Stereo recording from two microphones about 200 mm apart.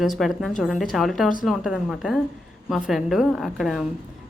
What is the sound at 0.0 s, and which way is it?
Speech, centre (ahead or behind).